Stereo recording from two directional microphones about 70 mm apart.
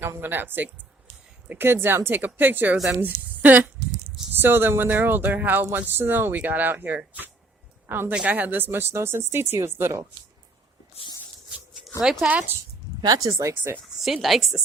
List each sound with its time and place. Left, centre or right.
0.0 s a woman's voice: right
8.1 s speech: centre; by 10.0 s right
12.3 s speech: right
13.1 s speech: right
14.0 s speech: centre